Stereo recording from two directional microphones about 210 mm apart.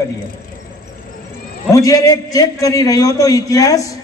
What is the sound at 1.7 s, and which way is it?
A man's voice, 15° left (ahead or behind).